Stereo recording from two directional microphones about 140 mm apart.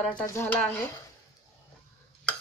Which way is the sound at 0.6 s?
10° left (ahead or behind).